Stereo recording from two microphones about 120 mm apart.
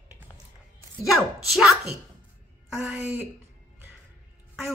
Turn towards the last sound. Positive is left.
turn(degrees=-10)  # may be behind; listen again after turning